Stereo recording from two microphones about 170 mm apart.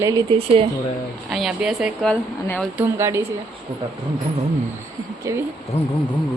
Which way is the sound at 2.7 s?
15° right (ahead or behind).